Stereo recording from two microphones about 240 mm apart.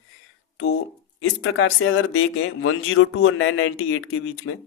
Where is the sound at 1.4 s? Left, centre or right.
Left.